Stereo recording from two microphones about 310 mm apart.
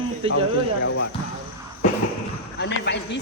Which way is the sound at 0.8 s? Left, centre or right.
Left.